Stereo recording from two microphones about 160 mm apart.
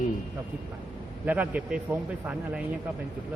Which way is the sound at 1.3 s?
10° right (ahead or behind).